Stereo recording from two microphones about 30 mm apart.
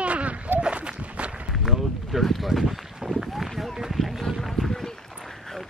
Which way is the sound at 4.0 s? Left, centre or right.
Centre.